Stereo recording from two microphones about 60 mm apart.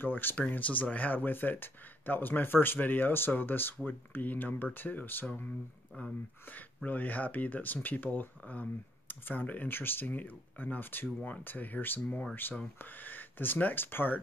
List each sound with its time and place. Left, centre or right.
0.0 s speech: left
6.5 s speech: left